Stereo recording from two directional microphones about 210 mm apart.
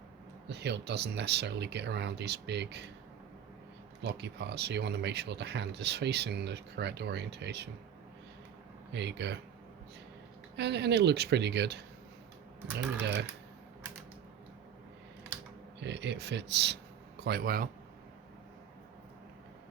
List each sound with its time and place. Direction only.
0.4 s speech: 55° right (ahead or behind)
4.0 s speech: 55° right (ahead or behind)
8.9 s speech: 55° right (ahead or behind)
10.6 s speech: 55° right (ahead or behind)
15.8 s speech: 55° right (ahead or behind)